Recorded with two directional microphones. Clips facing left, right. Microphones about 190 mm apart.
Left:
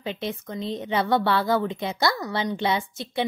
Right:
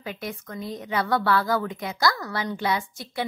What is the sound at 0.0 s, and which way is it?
A woman's voice, 25° left (ahead or behind).